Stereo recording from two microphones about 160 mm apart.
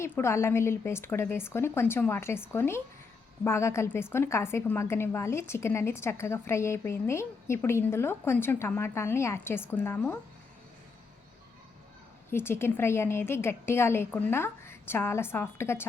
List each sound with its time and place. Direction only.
0.0 s a woman's voice: 15° left (ahead or behind)
12.3 s a woman's voice: 15° left (ahead or behind)